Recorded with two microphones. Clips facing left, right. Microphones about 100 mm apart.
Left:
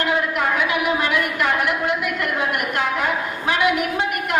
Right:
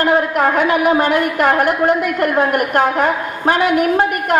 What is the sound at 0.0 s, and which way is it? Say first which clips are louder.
A woman's voice: right 7 dB; 45° right (ahead or behind).